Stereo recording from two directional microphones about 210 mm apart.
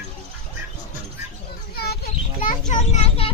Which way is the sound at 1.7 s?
50° left (ahead or behind).